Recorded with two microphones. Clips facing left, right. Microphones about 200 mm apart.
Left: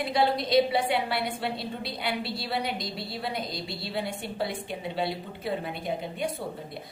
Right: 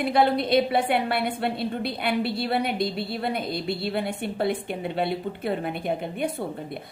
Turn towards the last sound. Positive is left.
turn(degrees=-55)  # may be behind; listen again after turning